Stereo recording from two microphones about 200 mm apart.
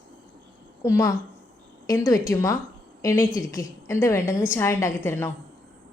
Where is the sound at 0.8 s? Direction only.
15° left (ahead or behind).